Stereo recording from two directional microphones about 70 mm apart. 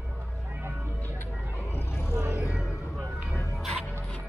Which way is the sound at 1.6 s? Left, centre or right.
Left.